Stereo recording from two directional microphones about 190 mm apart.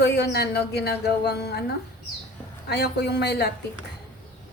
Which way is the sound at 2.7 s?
60° left (ahead or behind).